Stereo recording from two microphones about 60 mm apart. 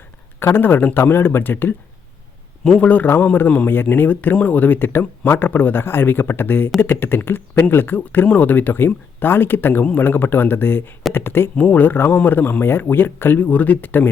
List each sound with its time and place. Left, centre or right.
0.3 s speech: left
2.7 s a man's voice: left
3.7 s speech: left
11.5 s speech: left